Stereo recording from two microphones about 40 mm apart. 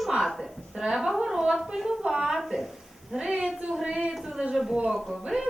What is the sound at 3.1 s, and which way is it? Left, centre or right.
A woman's voice, centre.